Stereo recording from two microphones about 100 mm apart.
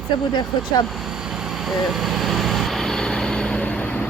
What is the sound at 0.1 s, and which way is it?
Speech, 50° left (ahead or behind).